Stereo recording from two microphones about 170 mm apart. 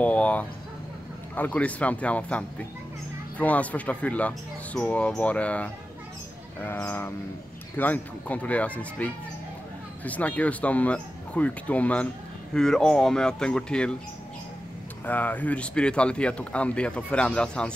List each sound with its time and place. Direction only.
0.0 s dog: 10° left (ahead or behind)
1.3 s speech: 10° left (ahead or behind)
15.0 s speech: 10° left (ahead or behind)